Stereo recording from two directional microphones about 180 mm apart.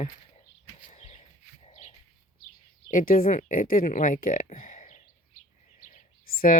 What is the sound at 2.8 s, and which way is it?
Speech, 50° left (ahead or behind).